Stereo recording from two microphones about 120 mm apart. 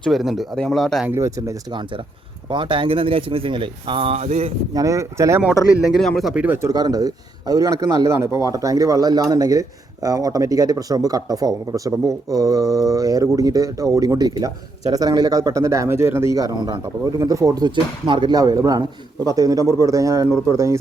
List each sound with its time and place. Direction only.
0.0 s speech: centre (ahead or behind)
1.0 s a man's voice: 25° right (ahead or behind)
1.7 s speech: 40° right (ahead or behind); by 4.5 s 60° right (ahead or behind)
4.7 s a man's voice: 25° right (ahead or behind)
6.0 s speech: centre (ahead or behind)
6.3 s speech: 15° right (ahead or behind)
6.7 s a man's voice: 30° right (ahead or behind)